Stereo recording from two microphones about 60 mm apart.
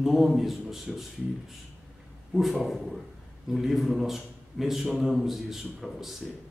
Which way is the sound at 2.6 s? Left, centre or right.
Centre.